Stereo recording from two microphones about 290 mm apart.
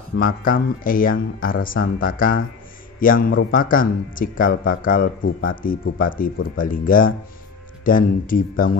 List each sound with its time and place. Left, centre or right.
0.2 s speech: left